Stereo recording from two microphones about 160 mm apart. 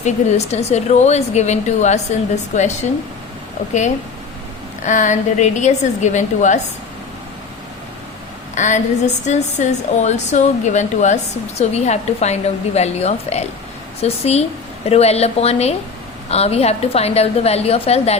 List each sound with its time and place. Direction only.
0.0 s a woman's voice: 45° left (ahead or behind)
4.8 s a woman's voice: 50° left (ahead or behind)
8.5 s a woman's voice: 50° left (ahead or behind)